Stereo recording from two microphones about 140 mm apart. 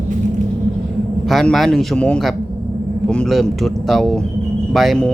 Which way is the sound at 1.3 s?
Centre (ahead or behind).